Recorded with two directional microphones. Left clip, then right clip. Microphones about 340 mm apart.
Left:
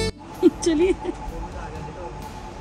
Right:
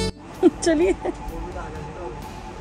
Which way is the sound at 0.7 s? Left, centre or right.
Centre.